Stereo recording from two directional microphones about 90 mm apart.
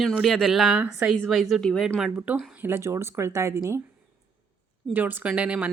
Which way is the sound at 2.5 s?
25° right (ahead or behind).